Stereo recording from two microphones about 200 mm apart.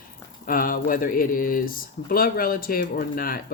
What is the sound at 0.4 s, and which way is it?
Speech, 45° left (ahead or behind).